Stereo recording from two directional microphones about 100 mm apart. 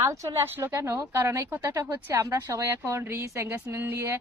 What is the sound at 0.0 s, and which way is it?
Speech, 30° right (ahead or behind).